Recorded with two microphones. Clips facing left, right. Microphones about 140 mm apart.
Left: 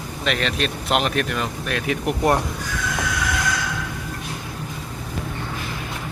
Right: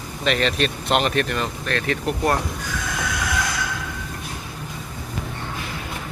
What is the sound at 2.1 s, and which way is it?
Speech, 20° left (ahead or behind).